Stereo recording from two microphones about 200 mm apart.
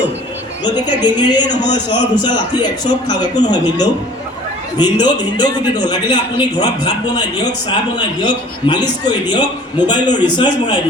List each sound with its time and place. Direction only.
0.6 s a man's voice: 20° left (ahead or behind)